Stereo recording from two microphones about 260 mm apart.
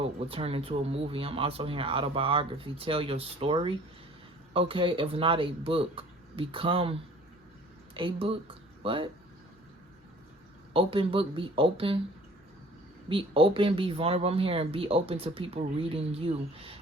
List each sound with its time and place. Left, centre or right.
0.0 s speech: right
7.9 s speech: centre
10.8 s speech: right
13.1 s speech: right